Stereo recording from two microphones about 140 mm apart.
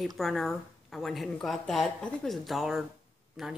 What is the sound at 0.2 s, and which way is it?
Speech, centre (ahead or behind).